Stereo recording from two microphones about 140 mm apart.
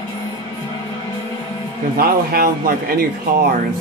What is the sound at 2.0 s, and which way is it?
Speech, 90° right.